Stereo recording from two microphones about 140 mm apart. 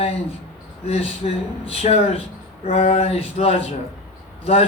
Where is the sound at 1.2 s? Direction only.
50° left (ahead or behind).